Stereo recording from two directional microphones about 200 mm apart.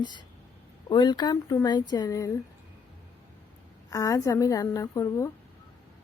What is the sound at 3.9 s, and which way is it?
A woman's voice, 15° left (ahead or behind).